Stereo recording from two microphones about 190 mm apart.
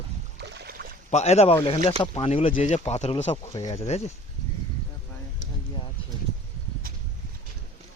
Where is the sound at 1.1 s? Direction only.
35° left (ahead or behind).